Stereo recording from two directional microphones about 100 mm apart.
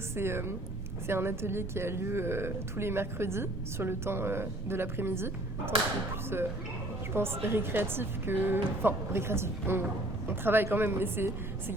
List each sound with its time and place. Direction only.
0.2 s a woman's voice: 25° right (ahead or behind)